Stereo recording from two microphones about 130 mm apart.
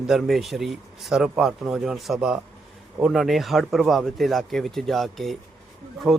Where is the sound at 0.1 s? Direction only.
Centre (ahead or behind).